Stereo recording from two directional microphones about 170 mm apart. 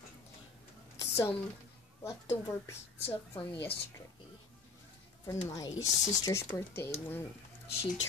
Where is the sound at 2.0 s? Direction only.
15° left (ahead or behind).